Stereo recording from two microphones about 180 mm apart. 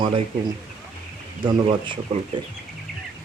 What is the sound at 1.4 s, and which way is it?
Speech, 25° right (ahead or behind).